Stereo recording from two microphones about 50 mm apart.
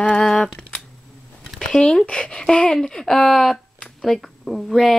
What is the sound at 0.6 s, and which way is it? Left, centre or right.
Camera, centre.